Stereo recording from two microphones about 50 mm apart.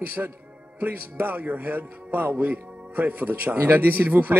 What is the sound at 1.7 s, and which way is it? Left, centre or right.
A man's voice, right.